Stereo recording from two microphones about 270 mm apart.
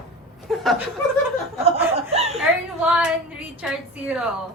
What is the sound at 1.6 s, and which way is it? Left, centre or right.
Chuckle, right.